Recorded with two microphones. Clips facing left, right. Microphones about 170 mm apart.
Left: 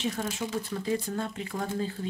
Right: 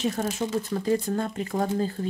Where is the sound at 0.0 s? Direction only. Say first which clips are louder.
Right 5 dB; 45° right (ahead or behind).